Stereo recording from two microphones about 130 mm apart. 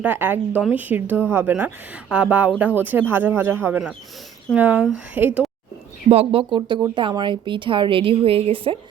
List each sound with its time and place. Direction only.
0.0 s speech: 15° right (ahead or behind)
6.1 s speech: 50° right (ahead or behind)